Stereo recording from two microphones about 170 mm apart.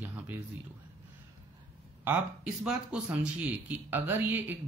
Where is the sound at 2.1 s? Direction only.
5° right (ahead or behind).